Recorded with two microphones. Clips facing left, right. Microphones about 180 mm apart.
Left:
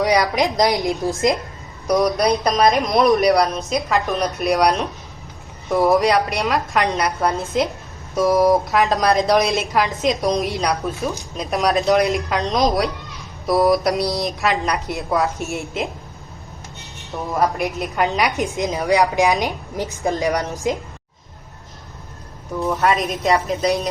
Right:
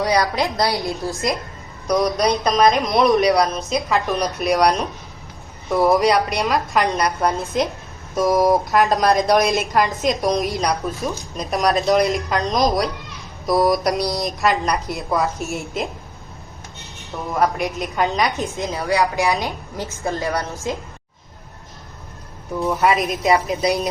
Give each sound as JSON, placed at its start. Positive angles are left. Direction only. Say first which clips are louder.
{"t": 0.0, "sound": "a woman's voice", "louder": "left 2 dB", "side_deg": 15}
{"t": 2.0, "sound": "a woman's voice", "louder": "left 1 dB", "side_deg": 0}
{"t": 17.0, "sound": "a woman's voice", "louder": "even", "side_deg": 0}
{"t": 18.3, "sound": "a woman's voice", "louder": "left 3 dB", "side_deg": 15}
{"t": 22.6, "sound": "a woman's voice", "louder": "right 1 dB", "side_deg": 0}